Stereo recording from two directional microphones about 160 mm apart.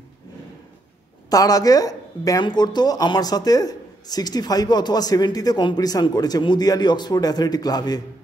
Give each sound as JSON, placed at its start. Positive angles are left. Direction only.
{"t": 1.3, "sound": "speech", "side_deg": 20}